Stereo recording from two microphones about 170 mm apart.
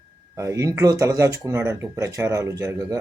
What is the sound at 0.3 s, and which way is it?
Speech, 20° right (ahead or behind).